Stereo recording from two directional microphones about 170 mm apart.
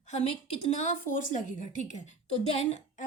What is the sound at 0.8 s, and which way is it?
A woman's voice, 50° left (ahead or behind).